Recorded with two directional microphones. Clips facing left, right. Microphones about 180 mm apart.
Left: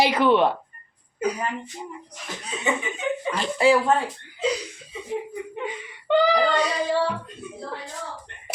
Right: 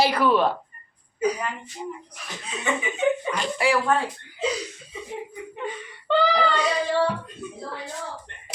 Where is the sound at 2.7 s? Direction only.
15° left (ahead or behind).